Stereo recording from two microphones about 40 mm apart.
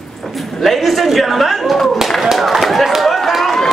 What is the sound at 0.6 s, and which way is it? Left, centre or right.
Speech, centre.